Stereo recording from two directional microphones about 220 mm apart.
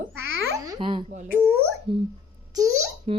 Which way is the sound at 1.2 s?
5° right (ahead or behind).